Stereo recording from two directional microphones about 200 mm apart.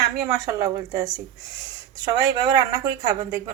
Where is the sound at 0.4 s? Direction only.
15° right (ahead or behind).